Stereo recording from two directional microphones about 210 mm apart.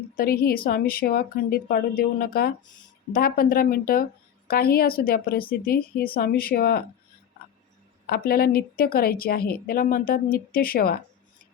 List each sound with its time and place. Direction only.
0.2 s a woman's voice: 45° left (ahead or behind)
8.0 s a woman's voice: 45° left (ahead or behind)